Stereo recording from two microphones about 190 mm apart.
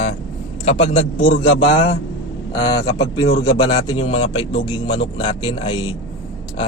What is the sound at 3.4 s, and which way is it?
Speech, 25° left (ahead or behind).